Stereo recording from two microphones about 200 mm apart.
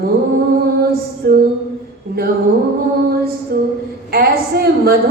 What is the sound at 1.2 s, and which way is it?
Speech, 50° right (ahead or behind).